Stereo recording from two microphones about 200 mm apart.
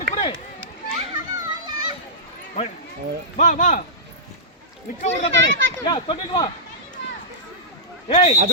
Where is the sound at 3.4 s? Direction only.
40° left (ahead or behind).